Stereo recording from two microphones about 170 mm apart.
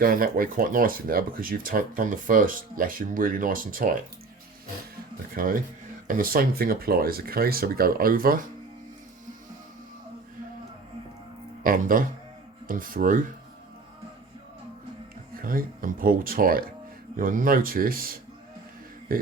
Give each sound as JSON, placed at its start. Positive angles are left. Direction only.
{"t": 0.0, "sound": "speech", "side_deg": -55}
{"t": 5.3, "sound": "speech", "side_deg": -55}
{"t": 11.6, "sound": "speech", "side_deg": -55}
{"t": 15.4, "sound": "speech", "side_deg": -55}
{"t": 19.1, "sound": "a sound", "side_deg": -55}